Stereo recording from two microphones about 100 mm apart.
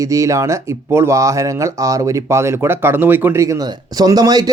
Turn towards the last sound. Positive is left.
turn(degrees=-40)  # may be behind; listen again after turning